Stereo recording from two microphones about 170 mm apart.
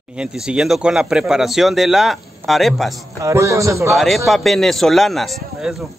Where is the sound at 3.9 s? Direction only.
Centre (ahead or behind).